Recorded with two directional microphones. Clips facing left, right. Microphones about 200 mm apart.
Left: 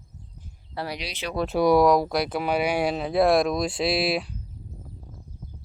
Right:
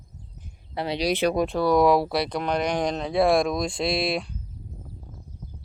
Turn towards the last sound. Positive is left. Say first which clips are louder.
# left 1 dB
turn(degrees=5)  # may be behind; listen again after turning